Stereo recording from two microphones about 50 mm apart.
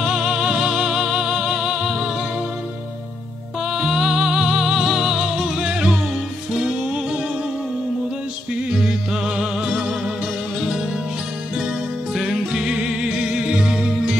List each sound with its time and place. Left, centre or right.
0.0 s music: centre
3.6 s music: centre
8.6 s music: centre
12.1 s music: centre